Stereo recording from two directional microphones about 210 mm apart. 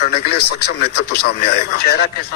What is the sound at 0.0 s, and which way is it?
A man's voice, 50° left (ahead or behind).